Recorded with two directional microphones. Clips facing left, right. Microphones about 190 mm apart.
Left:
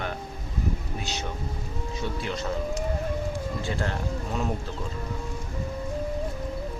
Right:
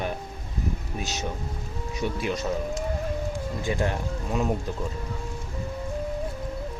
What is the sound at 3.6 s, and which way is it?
Speech, 15° right (ahead or behind).